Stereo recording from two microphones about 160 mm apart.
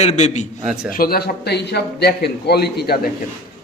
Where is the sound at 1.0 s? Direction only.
75° left (ahead or behind).